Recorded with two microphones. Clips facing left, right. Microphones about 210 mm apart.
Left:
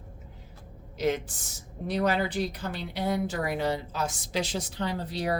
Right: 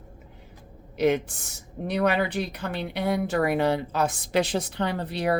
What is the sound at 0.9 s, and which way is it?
Speech, 60° right (ahead or behind).